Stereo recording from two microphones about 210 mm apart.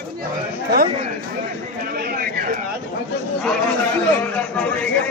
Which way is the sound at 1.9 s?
45° right (ahead or behind).